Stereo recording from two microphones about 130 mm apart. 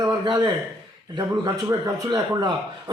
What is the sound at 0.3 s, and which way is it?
A man's voice, 35° right (ahead or behind).